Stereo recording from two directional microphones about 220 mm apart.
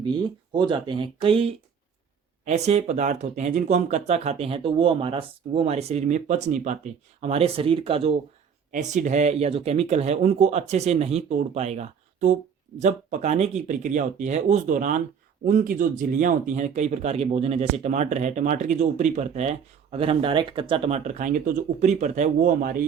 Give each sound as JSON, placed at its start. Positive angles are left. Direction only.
{"t": 0.5, "sound": "speech", "side_deg": -20}